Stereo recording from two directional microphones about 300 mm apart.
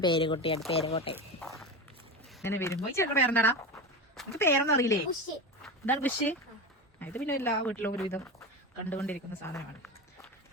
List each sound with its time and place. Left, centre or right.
0.0 s speech: centre
2.4 s speech: centre